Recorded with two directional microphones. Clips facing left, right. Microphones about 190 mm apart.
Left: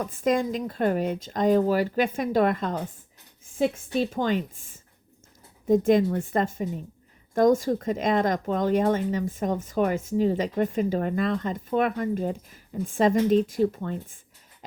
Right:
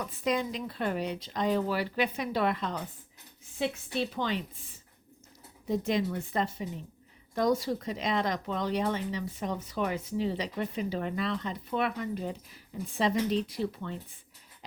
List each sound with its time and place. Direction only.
0.0 s speech: 45° left (ahead or behind)
3.9 s speech: 45° left (ahead or behind)